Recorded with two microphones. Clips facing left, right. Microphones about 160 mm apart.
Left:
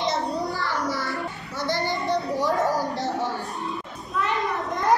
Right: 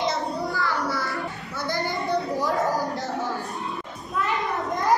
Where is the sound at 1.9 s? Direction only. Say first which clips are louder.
Even; 20° left (ahead or behind).